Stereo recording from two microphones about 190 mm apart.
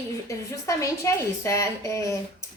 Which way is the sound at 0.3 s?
15° left (ahead or behind).